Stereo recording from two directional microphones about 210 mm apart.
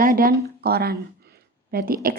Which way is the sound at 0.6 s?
50° right (ahead or behind).